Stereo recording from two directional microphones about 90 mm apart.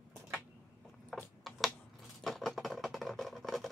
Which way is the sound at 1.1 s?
5° left (ahead or behind).